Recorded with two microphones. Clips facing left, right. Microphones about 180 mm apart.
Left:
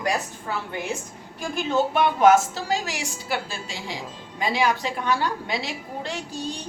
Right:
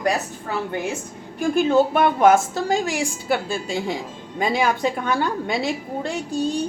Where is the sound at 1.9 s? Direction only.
50° right (ahead or behind).